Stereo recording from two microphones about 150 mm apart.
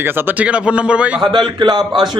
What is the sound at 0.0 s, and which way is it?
A man's voice, 15° right (ahead or behind).